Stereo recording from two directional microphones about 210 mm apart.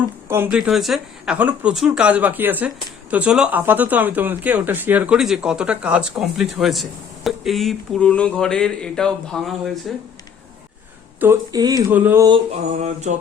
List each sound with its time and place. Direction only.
0.3 s speech: 10° right (ahead or behind)
11.2 s speech: 15° right (ahead or behind)
12.3 s mantra: 35° right (ahead or behind)